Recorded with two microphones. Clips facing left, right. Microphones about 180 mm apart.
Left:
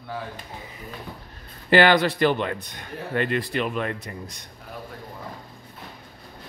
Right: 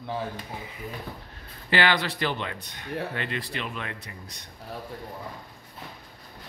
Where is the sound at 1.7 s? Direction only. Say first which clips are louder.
Left 7 dB; 50° left (ahead or behind).